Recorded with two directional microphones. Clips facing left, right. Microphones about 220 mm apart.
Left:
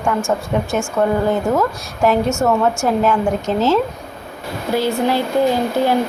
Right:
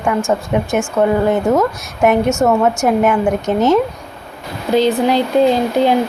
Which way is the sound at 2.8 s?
15° right (ahead or behind).